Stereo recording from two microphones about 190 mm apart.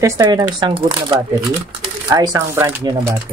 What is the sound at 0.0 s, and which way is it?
Speech, 20° right (ahead or behind).